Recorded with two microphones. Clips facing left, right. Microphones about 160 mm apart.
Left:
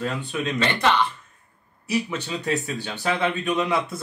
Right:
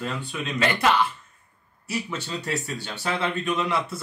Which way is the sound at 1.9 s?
15° left (ahead or behind).